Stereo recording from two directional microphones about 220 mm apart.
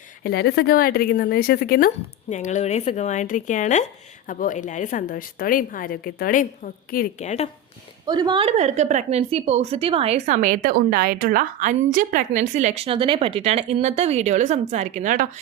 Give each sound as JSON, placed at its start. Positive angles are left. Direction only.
{"t": 0.2, "sound": "a woman's voice", "side_deg": 45}
{"t": 8.0, "sound": "a woman's voice", "side_deg": -20}